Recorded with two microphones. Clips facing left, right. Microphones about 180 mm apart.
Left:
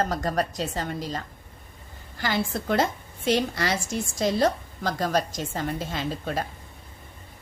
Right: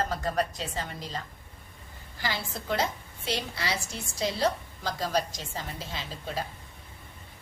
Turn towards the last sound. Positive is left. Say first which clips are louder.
# left 7 dB
turn(degrees=50)  # may be behind; listen again after turning